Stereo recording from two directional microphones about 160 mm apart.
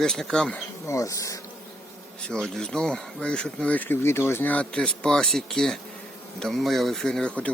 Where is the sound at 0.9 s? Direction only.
20° left (ahead or behind).